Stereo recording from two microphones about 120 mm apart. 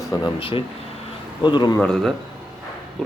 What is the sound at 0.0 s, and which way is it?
Air conditioning, 25° left (ahead or behind).